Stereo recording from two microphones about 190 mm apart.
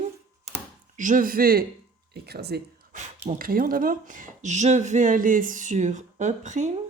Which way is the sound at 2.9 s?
45° right (ahead or behind).